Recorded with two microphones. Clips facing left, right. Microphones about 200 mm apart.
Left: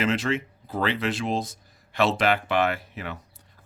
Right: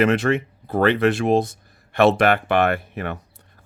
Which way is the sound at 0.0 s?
60° right (ahead or behind).